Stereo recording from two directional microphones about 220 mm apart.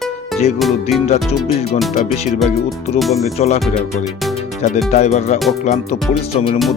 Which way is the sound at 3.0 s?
Centre (ahead or behind).